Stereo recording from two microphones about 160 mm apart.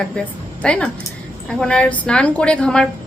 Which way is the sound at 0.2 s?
5° left (ahead or behind).